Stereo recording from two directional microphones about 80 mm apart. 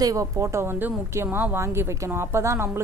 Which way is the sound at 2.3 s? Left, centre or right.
Right.